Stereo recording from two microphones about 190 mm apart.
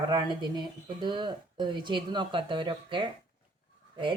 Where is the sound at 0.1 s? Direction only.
25° right (ahead or behind).